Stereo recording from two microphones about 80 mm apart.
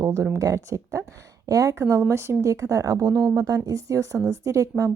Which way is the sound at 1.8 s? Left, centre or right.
Right.